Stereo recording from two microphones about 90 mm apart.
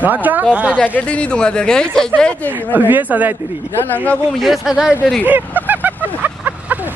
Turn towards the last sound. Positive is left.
turn(degrees=-20)  # may be behind; listen again after turning